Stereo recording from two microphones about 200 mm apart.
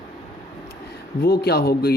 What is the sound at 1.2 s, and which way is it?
Speech, 50° left (ahead or behind).